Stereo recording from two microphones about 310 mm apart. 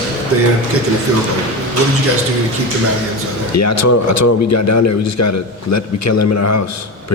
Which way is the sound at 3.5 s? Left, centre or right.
Left.